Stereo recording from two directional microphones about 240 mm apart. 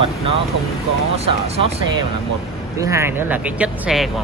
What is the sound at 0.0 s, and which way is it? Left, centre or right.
Speech, right.